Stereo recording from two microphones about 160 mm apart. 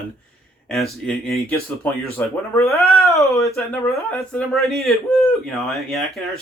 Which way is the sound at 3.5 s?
5° left (ahead or behind).